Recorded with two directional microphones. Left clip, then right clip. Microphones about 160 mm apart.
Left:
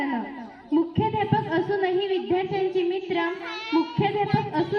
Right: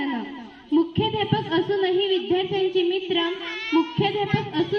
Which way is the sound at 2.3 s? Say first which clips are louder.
Right 2 dB; 15° right (ahead or behind).